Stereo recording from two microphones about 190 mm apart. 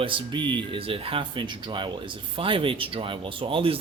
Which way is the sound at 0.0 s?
25° right (ahead or behind).